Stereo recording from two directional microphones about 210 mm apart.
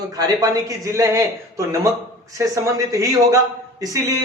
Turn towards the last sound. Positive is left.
turn(degrees=-15)  # may be behind; listen again after turning